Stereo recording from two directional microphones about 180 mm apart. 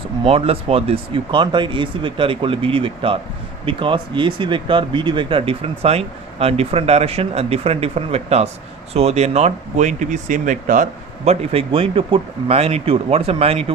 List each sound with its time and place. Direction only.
0.2 s speech: 35° right (ahead or behind)